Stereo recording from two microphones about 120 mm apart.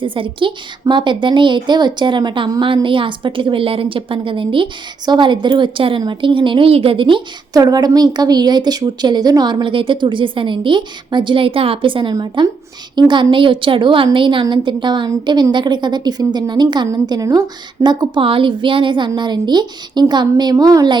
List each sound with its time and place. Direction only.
0.0 s a woman's voice: 45° right (ahead or behind)
7.5 s a woman's voice: 35° right (ahead or behind)